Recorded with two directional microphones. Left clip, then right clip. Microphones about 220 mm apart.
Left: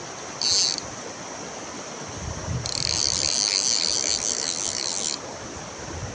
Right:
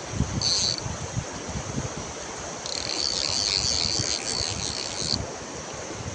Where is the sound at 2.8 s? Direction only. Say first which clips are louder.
Left 3 dB; 15° left (ahead or behind).